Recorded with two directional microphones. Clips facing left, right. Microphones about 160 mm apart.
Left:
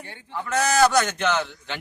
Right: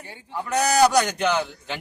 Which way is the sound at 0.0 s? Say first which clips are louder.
Right 1 dB; 10° right (ahead or behind).